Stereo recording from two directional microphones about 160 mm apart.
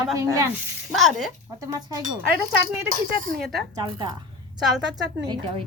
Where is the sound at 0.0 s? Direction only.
20° right (ahead or behind).